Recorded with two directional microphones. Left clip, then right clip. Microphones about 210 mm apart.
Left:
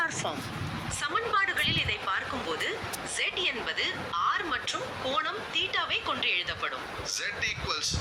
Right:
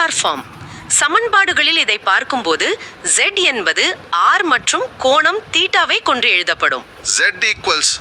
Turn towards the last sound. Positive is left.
turn(degrees=-50)  # may be behind; listen again after turning